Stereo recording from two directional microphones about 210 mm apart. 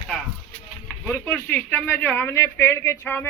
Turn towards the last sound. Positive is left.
turn(degrees=10)  # may be behind; listen again after turning